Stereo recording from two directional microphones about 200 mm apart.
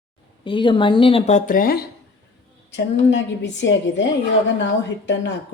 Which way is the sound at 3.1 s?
60° left (ahead or behind).